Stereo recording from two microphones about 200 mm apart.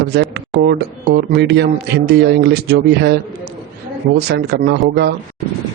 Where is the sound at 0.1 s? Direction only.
55° right (ahead or behind).